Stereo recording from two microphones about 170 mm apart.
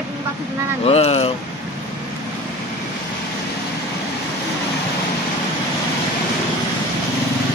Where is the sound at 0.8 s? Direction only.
35° left (ahead or behind).